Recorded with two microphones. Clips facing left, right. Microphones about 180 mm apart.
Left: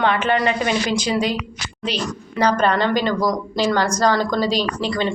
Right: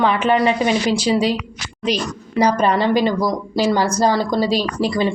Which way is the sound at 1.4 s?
10° right (ahead or behind).